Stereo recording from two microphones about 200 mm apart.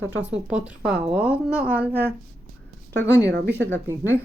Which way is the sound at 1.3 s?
10° left (ahead or behind).